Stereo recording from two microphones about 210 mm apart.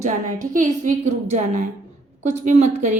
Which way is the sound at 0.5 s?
35° right (ahead or behind).